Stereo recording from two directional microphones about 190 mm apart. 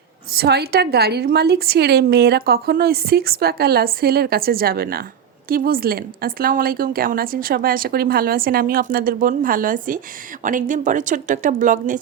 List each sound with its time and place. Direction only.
0.3 s a woman's voice: 55° right (ahead or behind)